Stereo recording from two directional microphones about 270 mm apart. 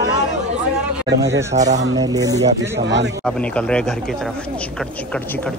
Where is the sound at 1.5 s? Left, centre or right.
Right.